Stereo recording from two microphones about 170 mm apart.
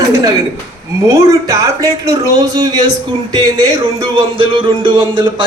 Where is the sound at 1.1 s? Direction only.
20° right (ahead or behind).